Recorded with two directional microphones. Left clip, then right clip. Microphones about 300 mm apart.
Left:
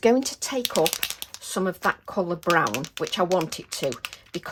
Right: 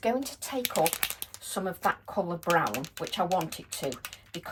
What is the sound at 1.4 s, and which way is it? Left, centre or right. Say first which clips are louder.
Speech: left 5 dB; left.